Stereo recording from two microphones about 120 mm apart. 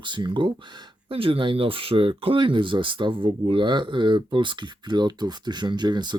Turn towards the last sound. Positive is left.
turn(degrees=-35)  # may be behind; listen again after turning